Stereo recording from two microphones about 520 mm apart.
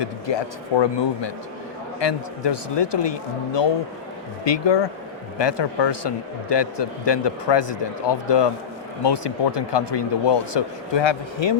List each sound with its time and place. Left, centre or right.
0.0 s a man's voice: left